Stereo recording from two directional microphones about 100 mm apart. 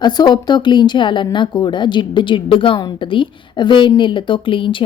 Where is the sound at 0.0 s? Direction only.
45° left (ahead or behind).